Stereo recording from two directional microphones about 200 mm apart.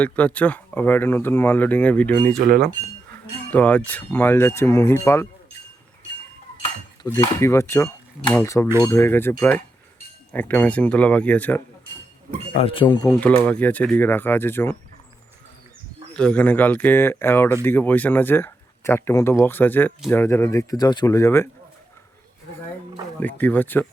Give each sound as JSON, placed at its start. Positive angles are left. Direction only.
{"t": 0.0, "sound": "speech", "side_deg": 5}
{"t": 2.4, "sound": "speech", "side_deg": -50}
{"t": 3.5, "sound": "speech", "side_deg": 5}
{"t": 7.0, "sound": "speech", "side_deg": 15}
{"t": 12.5, "sound": "speech", "side_deg": 30}
{"t": 13.1, "sound": "speech", "side_deg": 10}
{"t": 16.1, "sound": "speech", "side_deg": 5}
{"t": 23.2, "sound": "speech", "side_deg": 10}